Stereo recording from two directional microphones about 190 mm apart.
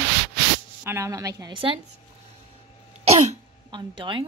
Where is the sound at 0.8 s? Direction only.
15° right (ahead or behind).